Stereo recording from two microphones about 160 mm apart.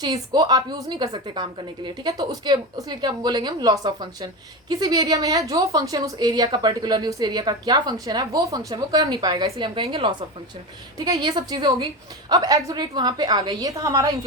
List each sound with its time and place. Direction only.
0.0 s a woman's voice: 25° right (ahead or behind)